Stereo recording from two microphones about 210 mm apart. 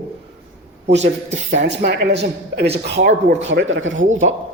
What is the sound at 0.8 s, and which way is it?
Speech, 55° right (ahead or behind).